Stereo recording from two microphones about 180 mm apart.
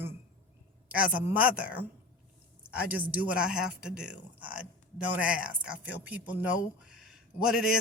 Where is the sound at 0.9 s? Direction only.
10° right (ahead or behind).